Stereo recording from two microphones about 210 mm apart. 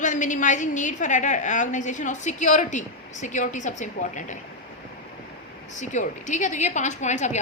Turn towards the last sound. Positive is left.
turn(degrees=35)  # may be behind; listen again after turning